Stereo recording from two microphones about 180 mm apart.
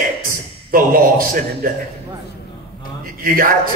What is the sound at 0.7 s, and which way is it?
A man's voice, 50° right (ahead or behind).